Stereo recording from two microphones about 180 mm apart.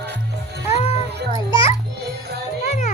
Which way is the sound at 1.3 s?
30° left (ahead or behind).